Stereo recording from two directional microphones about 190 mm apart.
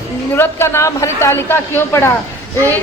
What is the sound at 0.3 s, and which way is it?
A woman's voice, 15° left (ahead or behind).